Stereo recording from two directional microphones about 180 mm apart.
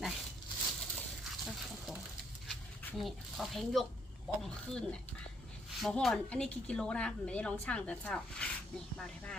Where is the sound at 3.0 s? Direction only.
Centre (ahead or behind).